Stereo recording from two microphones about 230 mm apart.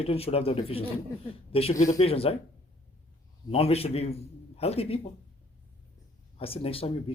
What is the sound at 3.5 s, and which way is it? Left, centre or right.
Speech, left.